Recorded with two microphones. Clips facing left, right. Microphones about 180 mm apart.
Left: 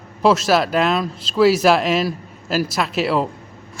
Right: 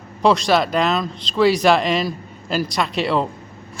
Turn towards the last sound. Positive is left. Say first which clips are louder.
# left 1 dB
turn(degrees=5)  # may be behind; listen again after turning